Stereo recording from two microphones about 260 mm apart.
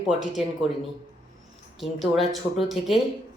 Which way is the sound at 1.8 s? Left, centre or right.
Centre.